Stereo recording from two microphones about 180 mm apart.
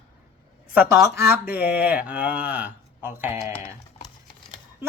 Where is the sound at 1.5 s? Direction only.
10° right (ahead or behind).